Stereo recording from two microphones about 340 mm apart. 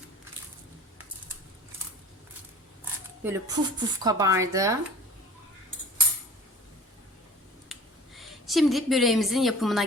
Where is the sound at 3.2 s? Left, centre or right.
Centre.